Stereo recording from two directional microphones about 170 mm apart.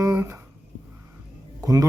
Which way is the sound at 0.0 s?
15° right (ahead or behind).